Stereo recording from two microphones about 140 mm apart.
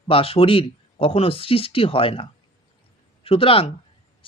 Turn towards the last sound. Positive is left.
turn(degrees=40)  # may be behind; listen again after turning